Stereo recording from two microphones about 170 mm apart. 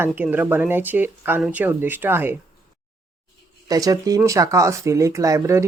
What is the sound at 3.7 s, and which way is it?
Speech, 20° right (ahead or behind).